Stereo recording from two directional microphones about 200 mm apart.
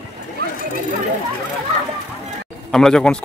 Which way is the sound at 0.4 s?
50° right (ahead or behind).